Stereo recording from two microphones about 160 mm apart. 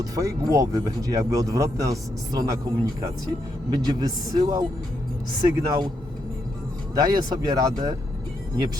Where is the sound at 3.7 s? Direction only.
25° right (ahead or behind).